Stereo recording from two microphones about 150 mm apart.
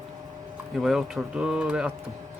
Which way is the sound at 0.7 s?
Centre (ahead or behind).